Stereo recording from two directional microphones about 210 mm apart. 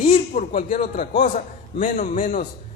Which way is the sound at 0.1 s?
40° left (ahead or behind).